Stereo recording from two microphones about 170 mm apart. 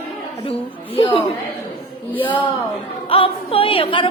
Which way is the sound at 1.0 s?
35° left (ahead or behind).